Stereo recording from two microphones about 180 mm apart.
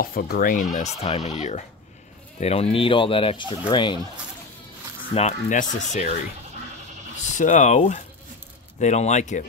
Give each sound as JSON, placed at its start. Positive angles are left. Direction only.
{"t": 0.0, "sound": "speech", "side_deg": 55}
{"t": 5.1, "sound": "speech", "side_deg": 40}
{"t": 7.3, "sound": "speech", "side_deg": 45}